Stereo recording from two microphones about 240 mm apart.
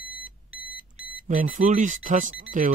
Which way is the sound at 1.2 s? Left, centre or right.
Right.